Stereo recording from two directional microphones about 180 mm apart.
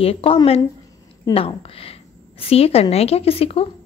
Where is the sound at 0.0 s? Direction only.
30° left (ahead or behind).